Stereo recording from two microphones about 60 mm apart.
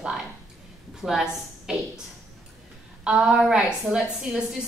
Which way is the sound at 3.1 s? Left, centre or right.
Centre.